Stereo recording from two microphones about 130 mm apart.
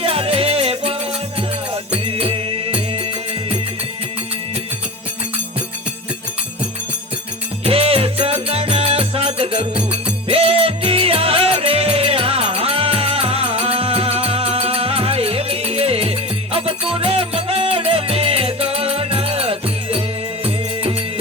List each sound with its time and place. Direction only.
0.0 s music: 45° right (ahead or behind)
7.6 s music: 50° right (ahead or behind)